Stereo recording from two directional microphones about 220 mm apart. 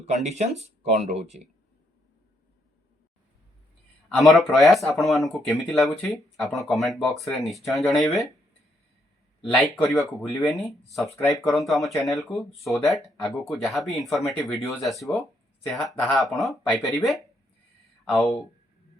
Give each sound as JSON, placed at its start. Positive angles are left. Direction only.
{"t": 0.0, "sound": "speech", "side_deg": -30}
{"t": 4.2, "sound": "speech", "side_deg": 0}
{"t": 9.4, "sound": "speech", "side_deg": 0}